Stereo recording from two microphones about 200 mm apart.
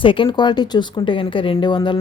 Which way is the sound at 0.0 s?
25° left (ahead or behind).